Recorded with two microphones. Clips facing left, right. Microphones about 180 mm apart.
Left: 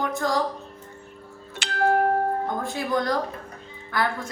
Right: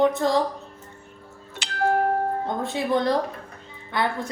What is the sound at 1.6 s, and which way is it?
Music, 60° left (ahead or behind).